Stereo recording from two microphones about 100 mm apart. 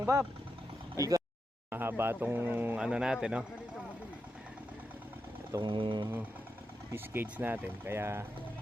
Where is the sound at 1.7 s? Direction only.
20° right (ahead or behind).